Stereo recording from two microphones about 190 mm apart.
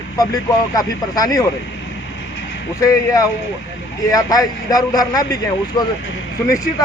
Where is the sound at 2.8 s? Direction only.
20° left (ahead or behind).